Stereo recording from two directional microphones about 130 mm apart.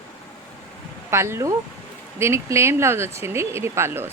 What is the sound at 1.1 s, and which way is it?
Speech, 20° right (ahead or behind).